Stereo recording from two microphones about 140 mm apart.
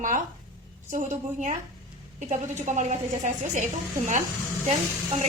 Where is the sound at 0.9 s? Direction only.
60° right (ahead or behind).